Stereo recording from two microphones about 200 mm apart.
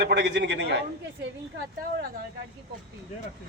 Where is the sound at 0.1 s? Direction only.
60° right (ahead or behind).